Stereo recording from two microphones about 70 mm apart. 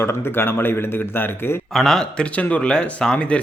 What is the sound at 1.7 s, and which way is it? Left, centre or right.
Speech, centre.